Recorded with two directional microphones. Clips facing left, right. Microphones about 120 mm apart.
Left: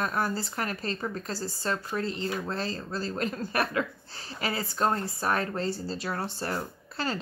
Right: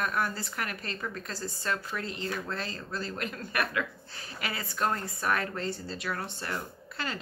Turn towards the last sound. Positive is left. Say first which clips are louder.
# left 4 dB
turn(degrees=35)  # may be behind; listen again after turning